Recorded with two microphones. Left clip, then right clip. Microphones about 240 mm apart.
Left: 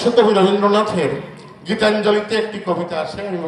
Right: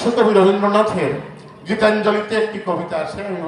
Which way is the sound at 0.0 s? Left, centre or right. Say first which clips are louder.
Even; left.